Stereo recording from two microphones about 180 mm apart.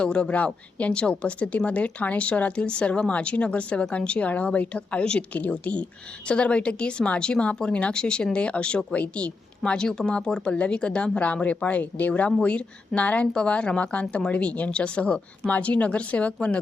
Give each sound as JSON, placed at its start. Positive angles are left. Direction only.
{"t": 0.0, "sound": "speech", "side_deg": 5}